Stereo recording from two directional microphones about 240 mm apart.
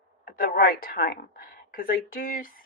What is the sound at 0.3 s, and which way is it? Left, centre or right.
A woman's voice, left.